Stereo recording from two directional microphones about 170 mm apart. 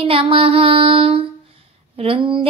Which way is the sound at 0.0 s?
30° right (ahead or behind).